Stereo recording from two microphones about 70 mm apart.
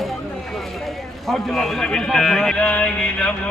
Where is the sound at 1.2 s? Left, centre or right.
Centre.